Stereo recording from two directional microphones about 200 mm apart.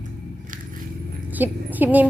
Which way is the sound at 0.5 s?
40° right (ahead or behind).